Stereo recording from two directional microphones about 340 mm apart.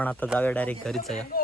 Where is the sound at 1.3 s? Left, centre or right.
Left.